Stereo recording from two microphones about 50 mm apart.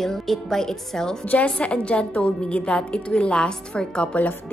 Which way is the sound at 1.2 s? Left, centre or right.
Left.